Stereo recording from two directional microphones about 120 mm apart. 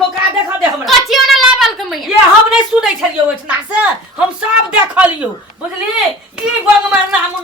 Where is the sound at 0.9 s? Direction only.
Centre (ahead or behind).